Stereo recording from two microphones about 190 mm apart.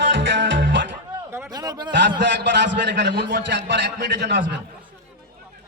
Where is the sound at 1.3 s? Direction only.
20° right (ahead or behind).